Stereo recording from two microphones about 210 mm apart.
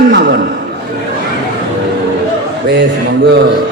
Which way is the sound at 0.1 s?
50° right (ahead or behind).